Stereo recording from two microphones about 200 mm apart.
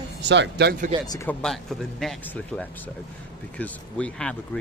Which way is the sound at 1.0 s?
20° left (ahead or behind).